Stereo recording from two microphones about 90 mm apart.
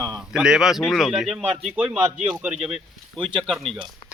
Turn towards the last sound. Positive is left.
turn(degrees=-65)  # may be behind; listen again after turning